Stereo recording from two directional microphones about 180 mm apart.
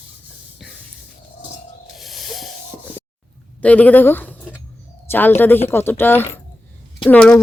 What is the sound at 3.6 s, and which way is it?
Speech, 10° left (ahead or behind).